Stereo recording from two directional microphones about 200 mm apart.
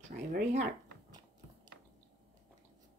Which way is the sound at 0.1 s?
45° right (ahead or behind).